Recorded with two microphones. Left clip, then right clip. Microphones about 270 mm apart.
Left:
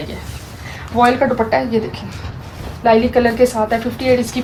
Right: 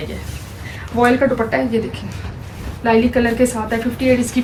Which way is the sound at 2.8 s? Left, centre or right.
Left.